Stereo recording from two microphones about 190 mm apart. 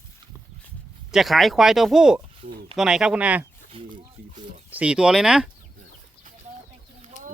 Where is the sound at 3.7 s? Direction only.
30° right (ahead or behind).